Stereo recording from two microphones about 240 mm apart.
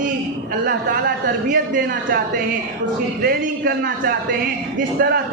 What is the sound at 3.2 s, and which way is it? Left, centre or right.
A man's voice, right.